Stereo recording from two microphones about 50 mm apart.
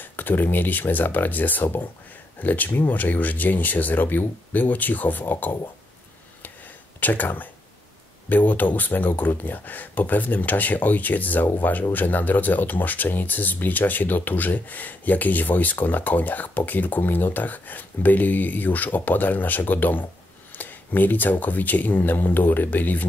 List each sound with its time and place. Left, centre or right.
0.0 s speech: left
7.0 s speech: left